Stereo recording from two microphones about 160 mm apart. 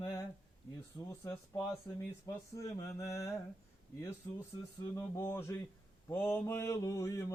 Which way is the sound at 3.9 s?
20° left (ahead or behind).